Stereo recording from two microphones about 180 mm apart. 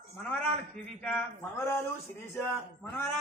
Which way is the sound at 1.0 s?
10° left (ahead or behind).